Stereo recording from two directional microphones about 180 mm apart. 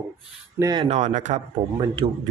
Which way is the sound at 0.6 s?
25° right (ahead or behind).